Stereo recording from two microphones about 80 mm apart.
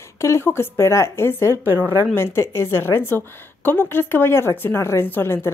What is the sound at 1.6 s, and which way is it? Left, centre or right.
Speech, right.